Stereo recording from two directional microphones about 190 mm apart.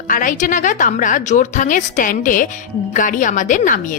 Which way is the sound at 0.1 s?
45° left (ahead or behind).